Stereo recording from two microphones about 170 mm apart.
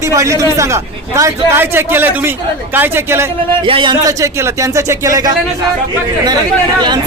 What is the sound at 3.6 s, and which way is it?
A man's voice, 30° right (ahead or behind).